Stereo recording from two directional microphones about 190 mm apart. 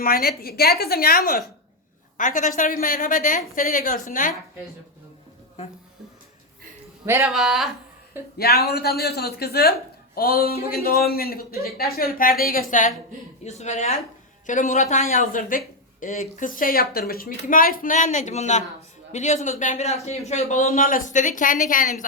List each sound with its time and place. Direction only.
0.0 s speech: 50° left (ahead or behind)
7.0 s speech: 10° right (ahead or behind)
7.3 s speech: centre (ahead or behind)
8.4 s a man's voice: 55° left (ahead or behind)